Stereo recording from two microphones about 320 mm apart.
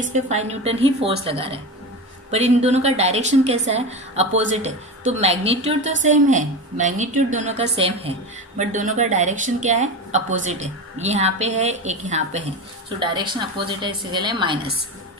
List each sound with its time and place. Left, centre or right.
0.0 s a woman's voice: right